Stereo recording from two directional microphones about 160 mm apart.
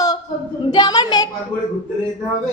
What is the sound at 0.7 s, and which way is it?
Speech, 25° left (ahead or behind).